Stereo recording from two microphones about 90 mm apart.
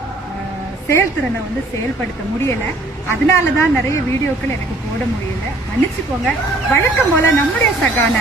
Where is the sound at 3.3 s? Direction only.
30° left (ahead or behind).